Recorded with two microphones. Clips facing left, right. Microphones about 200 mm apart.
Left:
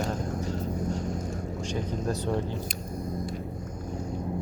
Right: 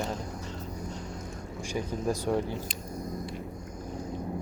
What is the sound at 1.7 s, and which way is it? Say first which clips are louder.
Speech: right 1 dB; 10° right (ahead or behind).